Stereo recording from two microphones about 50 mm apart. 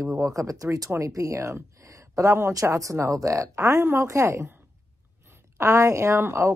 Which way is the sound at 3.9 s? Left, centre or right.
Right.